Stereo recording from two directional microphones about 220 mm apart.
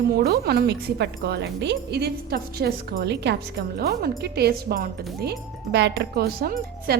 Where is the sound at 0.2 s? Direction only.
45° right (ahead or behind).